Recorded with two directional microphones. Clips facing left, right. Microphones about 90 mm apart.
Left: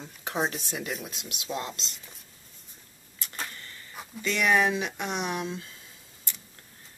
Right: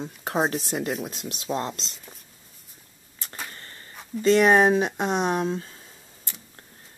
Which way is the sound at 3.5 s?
35° right (ahead or behind).